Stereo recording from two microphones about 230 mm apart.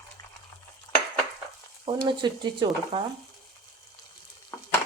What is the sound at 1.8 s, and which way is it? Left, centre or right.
A woman's voice, right.